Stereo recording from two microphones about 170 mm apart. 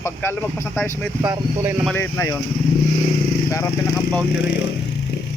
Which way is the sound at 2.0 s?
15° left (ahead or behind).